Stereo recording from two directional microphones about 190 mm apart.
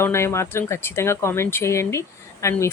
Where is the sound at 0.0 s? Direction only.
15° left (ahead or behind).